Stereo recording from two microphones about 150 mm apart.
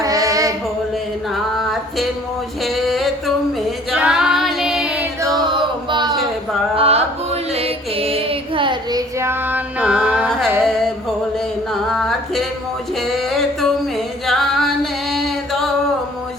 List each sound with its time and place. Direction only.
0.0 s music: 25° right (ahead or behind)
1.3 s music: centre (ahead or behind)
2.6 s a sound: centre (ahead or behind)
3.9 s female singing: 5° right (ahead or behind)
5.5 s chant: 30° right (ahead or behind)
6.7 s music: 40° right (ahead or behind); by 12.5 s centre (ahead or behind)
13.0 s a sound: centre (ahead or behind)
14.3 s singing: centre (ahead or behind)
15.1 s chant: centre (ahead or behind)